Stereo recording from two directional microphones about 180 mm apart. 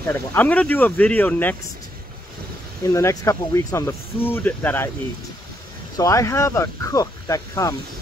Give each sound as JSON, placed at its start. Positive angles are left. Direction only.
{"t": 0.0, "sound": "speech", "side_deg": 10}
{"t": 2.9, "sound": "speech", "side_deg": 15}
{"t": 5.9, "sound": "speech", "side_deg": 15}